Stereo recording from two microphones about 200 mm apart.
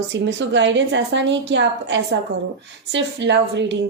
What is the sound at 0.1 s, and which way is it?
A woman's voice, 60° right (ahead or behind).